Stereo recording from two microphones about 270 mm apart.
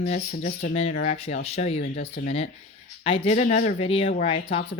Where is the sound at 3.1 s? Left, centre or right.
Left.